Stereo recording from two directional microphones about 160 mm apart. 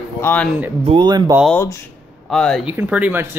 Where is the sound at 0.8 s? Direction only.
30° right (ahead or behind).